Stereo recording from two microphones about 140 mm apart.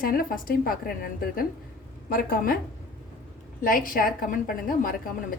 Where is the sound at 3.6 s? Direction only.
75° left (ahead or behind).